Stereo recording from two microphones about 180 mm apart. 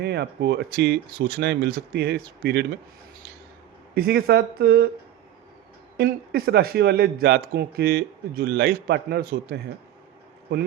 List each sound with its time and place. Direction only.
0.0 s speech: 70° right (ahead or behind)
3.9 s speech: 60° right (ahead or behind)
6.0 s speech: 60° right (ahead or behind)